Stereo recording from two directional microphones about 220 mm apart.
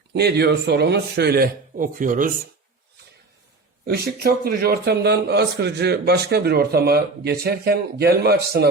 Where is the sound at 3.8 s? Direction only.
45° right (ahead or behind).